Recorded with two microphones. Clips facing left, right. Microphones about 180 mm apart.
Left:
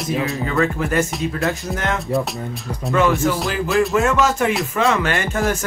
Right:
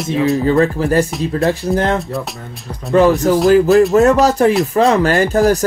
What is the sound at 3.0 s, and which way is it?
Speech, 35° right (ahead or behind).